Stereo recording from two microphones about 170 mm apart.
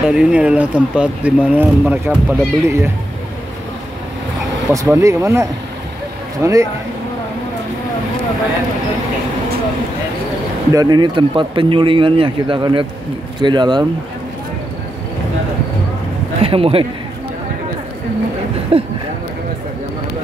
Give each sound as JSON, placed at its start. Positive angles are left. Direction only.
{"t": 0.1, "sound": "speech", "side_deg": -5}
{"t": 4.7, "sound": "speech", "side_deg": -20}
{"t": 10.7, "sound": "speech", "side_deg": -25}
{"t": 16.3, "sound": "a man's voice", "side_deg": -35}
{"t": 18.7, "sound": "speech", "side_deg": -35}